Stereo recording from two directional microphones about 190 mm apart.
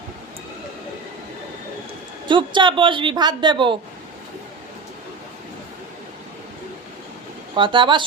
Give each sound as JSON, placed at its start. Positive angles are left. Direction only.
{"t": 2.2, "sound": "a man's voice", "side_deg": -25}
{"t": 7.5, "sound": "a man's voice", "side_deg": -25}